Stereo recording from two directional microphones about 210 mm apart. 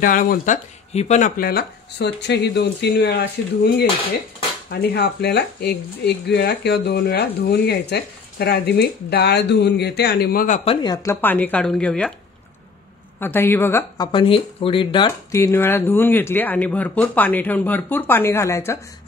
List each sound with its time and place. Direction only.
0.0 s speech: 40° left (ahead or behind); by 12.1 s 5° left (ahead or behind)
13.2 s speech: 10° left (ahead or behind)